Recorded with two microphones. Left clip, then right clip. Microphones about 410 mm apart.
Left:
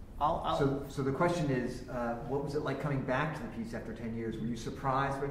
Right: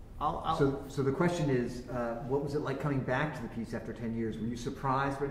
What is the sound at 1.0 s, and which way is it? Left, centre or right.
Speech, right.